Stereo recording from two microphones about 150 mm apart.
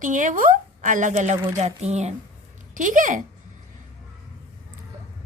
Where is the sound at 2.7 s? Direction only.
60° right (ahead or behind).